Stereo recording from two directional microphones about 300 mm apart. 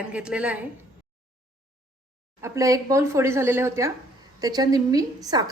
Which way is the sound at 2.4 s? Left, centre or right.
Centre.